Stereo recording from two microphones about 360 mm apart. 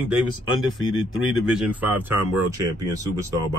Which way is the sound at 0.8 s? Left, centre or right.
Left.